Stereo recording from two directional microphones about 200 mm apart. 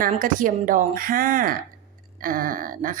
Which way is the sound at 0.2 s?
40° right (ahead or behind).